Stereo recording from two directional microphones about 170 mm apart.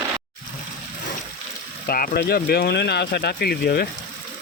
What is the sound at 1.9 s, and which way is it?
Speech, 60° left (ahead or behind).